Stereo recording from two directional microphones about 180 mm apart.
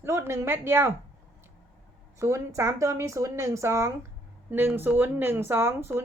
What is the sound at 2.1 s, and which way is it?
Speech, 15° right (ahead or behind).